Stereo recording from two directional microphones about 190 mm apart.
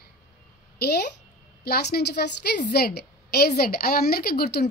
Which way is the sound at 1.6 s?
55° left (ahead or behind).